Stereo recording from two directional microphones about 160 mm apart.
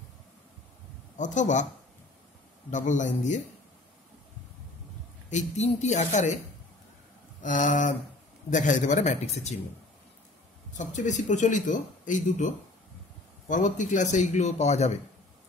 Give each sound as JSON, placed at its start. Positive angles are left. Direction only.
{"t": 1.1, "sound": "speech", "side_deg": 50}
{"t": 2.7, "sound": "speech", "side_deg": 50}
{"t": 5.3, "sound": "speech", "side_deg": 45}
{"t": 7.4, "sound": "speech", "side_deg": 55}
{"t": 10.8, "sound": "speech", "side_deg": 50}